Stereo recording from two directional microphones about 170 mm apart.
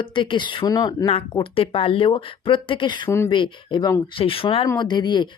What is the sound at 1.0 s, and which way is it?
Speech, 35° left (ahead or behind).